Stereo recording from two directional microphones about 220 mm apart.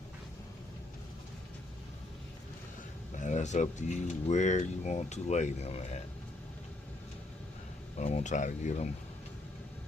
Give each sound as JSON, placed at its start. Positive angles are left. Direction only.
{"t": 3.2, "sound": "speech", "side_deg": 35}
{"t": 7.9, "sound": "speech", "side_deg": 30}